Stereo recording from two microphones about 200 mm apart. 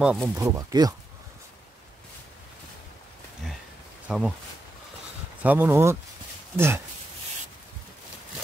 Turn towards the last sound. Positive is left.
turn(degrees=-10)  # may be behind; listen again after turning